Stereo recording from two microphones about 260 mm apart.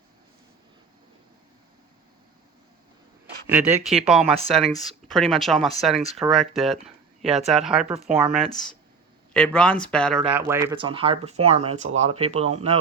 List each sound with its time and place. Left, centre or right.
3.4 s speech: centre
10.3 s speech: centre; by 12.7 s right